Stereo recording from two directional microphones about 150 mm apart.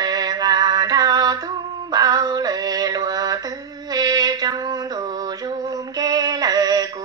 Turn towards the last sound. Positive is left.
turn(degrees=-25)  # may be behind; listen again after turning